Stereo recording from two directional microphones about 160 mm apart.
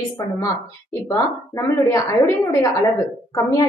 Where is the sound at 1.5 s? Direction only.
15° left (ahead or behind).